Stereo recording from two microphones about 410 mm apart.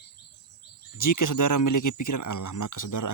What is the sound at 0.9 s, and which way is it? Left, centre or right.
Speech, left.